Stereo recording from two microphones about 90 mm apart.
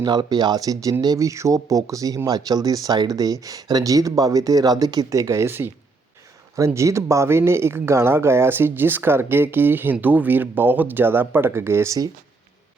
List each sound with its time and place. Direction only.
0.0 s speech: 50° right (ahead or behind)
5.5 s speech: 25° right (ahead or behind)
6.7 s speech: 35° right (ahead or behind)